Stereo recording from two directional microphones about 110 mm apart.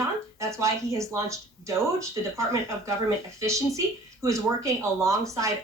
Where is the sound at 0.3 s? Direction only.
25° right (ahead or behind).